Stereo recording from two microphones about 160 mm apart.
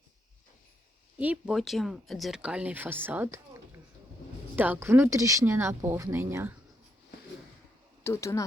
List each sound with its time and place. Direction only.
1.2 s speech: 5° right (ahead or behind)
8.0 s speech: 15° left (ahead or behind)